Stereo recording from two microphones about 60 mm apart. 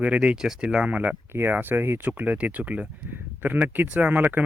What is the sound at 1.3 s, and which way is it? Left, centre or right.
Speech, right.